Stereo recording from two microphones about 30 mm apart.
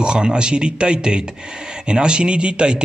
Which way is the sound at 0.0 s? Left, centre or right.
Right.